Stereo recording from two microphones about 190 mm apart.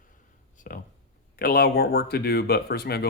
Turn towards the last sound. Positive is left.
turn(degrees=55)  # may be behind; listen again after turning